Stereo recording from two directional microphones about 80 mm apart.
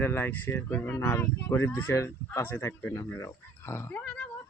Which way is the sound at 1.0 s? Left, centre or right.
Left.